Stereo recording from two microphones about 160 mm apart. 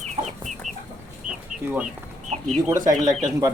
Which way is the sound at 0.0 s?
45° right (ahead or behind).